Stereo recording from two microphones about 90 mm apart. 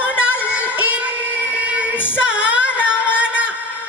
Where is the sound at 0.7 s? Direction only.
15° right (ahead or behind).